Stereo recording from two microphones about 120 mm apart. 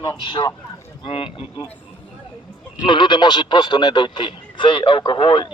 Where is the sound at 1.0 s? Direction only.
50° left (ahead or behind).